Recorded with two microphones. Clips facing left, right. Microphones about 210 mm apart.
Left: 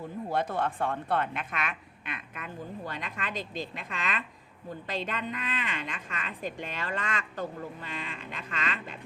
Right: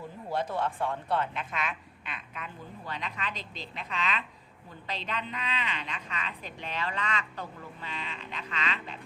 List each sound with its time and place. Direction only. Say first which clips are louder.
0.3 s a woman's voice: left 1 dB; 55° left (ahead or behind)